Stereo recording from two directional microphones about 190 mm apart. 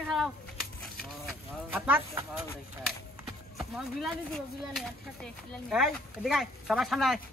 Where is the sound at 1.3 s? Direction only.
10° right (ahead or behind).